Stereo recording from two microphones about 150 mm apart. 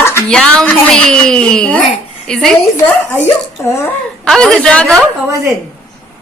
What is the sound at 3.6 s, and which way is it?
Speech, 15° left (ahead or behind).